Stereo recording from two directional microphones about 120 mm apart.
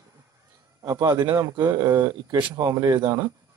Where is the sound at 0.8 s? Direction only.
25° right (ahead or behind).